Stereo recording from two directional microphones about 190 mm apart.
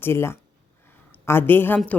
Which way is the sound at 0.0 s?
15° left (ahead or behind).